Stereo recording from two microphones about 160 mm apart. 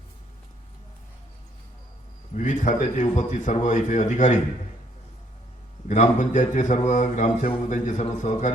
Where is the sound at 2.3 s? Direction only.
50° left (ahead or behind).